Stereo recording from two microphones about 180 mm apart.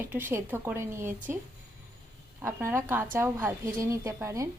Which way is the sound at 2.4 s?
15° right (ahead or behind).